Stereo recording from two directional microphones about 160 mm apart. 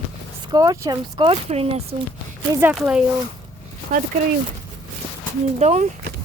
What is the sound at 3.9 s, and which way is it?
Speech, 50° right (ahead or behind).